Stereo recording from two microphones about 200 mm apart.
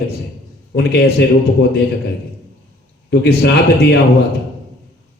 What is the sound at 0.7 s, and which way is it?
Speech, 55° left (ahead or behind).